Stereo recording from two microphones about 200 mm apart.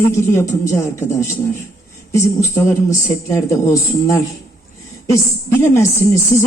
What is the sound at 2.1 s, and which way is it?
Speech, 15° left (ahead or behind).